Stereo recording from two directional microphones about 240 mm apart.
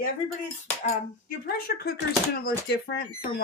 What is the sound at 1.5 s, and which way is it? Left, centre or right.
Speech, left.